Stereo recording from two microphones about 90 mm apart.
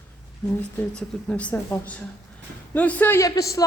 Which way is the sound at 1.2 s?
15° left (ahead or behind).